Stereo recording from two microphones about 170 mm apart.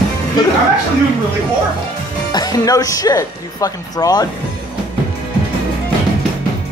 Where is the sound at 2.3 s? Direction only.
20° left (ahead or behind).